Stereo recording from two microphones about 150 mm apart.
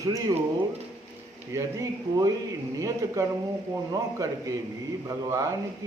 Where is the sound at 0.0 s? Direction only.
25° right (ahead or behind).